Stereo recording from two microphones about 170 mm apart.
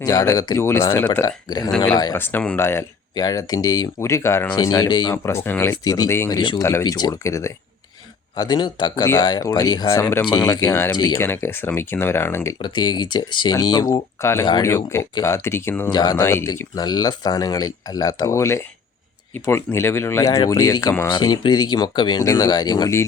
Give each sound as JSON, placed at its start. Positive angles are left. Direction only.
{"t": 0.0, "sound": "speech", "side_deg": 20}
{"t": 2.1, "sound": "speech", "side_deg": 10}
{"t": 5.1, "sound": "speech", "side_deg": 15}
{"t": 5.7, "sound": "speech", "side_deg": 25}
{"t": 12.6, "sound": "speech", "side_deg": 25}
{"t": 14.4, "sound": "speech", "side_deg": 25}
{"t": 14.7, "sound": "speech", "side_deg": 15}
{"t": 15.9, "sound": "speech", "side_deg": 25}